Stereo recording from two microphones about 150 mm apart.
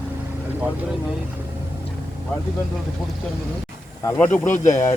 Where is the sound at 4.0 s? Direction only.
20° left (ahead or behind).